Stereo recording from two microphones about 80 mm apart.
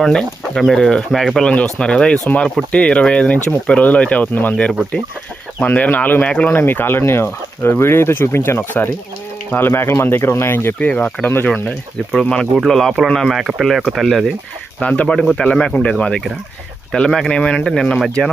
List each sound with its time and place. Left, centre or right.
0.0 s speech: centre; by 10.8 s left
10.8 s speech: centre
12.6 s speech: centre
14.8 s speech: centre